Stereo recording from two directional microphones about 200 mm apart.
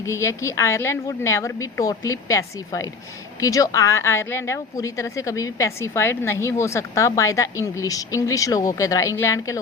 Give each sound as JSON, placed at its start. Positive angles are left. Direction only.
{"t": 0.0, "sound": "a woman's voice", "side_deg": 15}